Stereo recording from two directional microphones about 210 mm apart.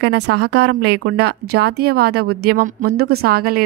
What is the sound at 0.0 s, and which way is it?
A woman's voice, 50° right (ahead or behind).